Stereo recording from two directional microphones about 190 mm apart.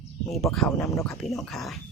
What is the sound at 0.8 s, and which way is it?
Speech, 15° left (ahead or behind).